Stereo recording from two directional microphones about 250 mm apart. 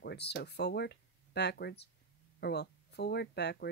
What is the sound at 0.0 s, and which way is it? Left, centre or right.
Speech, left.